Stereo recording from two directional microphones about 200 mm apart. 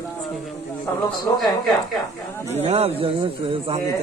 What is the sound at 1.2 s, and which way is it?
Speech, 20° left (ahead or behind).